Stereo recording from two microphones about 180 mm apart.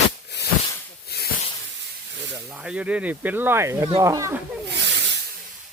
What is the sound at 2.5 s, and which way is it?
Speech, 5° right (ahead or behind).